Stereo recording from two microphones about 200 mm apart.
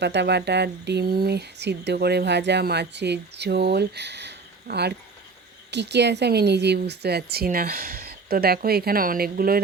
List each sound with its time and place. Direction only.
0.0 s a woman's voice: 60° right (ahead or behind)